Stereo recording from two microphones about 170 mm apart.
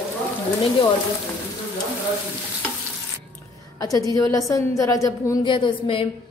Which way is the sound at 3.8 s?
20° left (ahead or behind).